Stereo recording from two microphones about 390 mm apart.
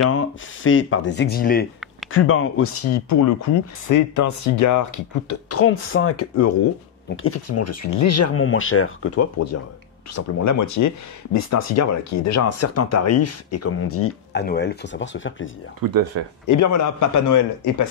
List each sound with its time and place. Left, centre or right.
0.1 s a man's voice: left
15.8 s speech: right
16.4 s a man's voice: left